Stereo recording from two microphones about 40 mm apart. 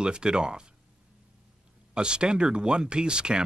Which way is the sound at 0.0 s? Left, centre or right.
Right.